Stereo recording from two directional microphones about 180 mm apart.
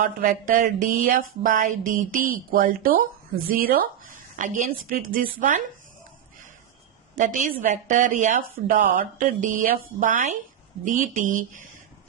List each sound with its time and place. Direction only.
0.0 s speech: 50° right (ahead or behind)
7.2 s speech: 45° right (ahead or behind)